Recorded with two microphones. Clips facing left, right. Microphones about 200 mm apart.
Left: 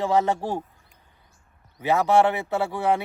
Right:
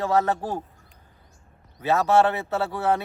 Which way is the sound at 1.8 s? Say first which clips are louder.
Even; 15° left (ahead or behind).